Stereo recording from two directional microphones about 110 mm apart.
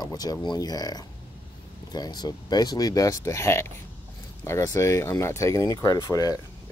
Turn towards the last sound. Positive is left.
turn(degrees=35)  # may be behind; listen again after turning